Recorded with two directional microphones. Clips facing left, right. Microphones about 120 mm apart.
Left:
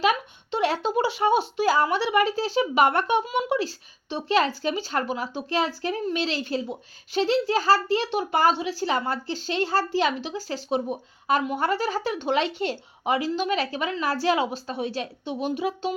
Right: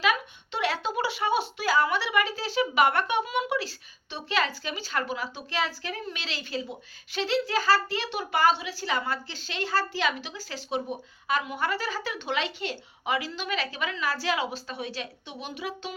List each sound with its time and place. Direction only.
0.0 s a woman's voice: 40° left (ahead or behind)